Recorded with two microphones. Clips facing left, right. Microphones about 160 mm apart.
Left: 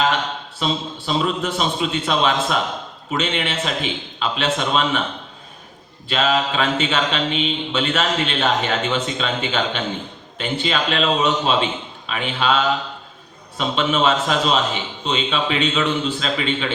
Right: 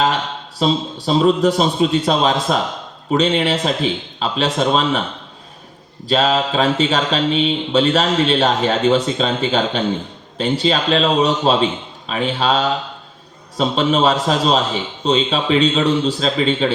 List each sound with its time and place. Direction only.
0.6 s speech: 35° right (ahead or behind)
6.1 s speech: 35° right (ahead or behind)